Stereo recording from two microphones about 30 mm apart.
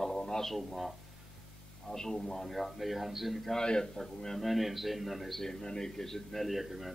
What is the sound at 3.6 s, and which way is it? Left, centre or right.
Speech, left.